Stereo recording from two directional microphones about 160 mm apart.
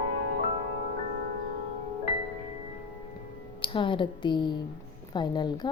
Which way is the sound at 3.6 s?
30° left (ahead or behind).